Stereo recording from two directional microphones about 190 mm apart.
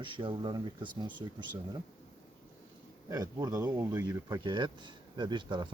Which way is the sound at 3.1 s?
20° right (ahead or behind).